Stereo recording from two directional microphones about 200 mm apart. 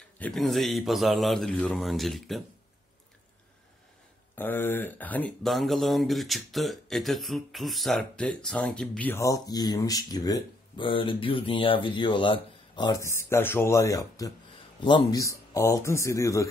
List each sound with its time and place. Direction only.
0.2 s speech: centre (ahead or behind)
4.4 s speech: 10° left (ahead or behind)